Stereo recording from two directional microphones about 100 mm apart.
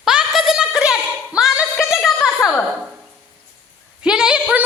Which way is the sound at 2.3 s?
20° left (ahead or behind).